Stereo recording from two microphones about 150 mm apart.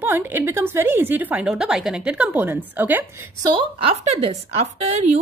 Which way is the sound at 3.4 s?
35° right (ahead or behind).